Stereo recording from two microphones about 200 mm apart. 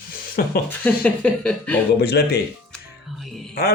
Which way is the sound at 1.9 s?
55° left (ahead or behind).